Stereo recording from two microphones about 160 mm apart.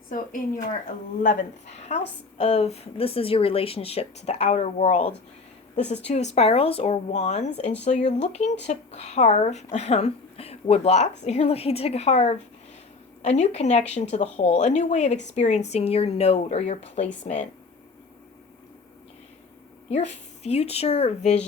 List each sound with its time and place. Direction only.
1.2 s a woman's voice: 50° left (ahead or behind)
19.9 s speech: 45° left (ahead or behind)